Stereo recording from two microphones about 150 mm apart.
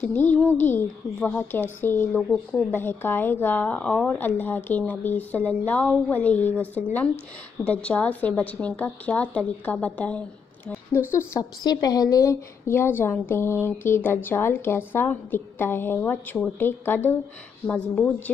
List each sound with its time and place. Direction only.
0.0 s a woman's voice: 10° left (ahead or behind)
7.6 s a woman's voice: 10° left (ahead or behind)
11.6 s a woman's voice: 25° left (ahead or behind); by 18.3 s 10° left (ahead or behind)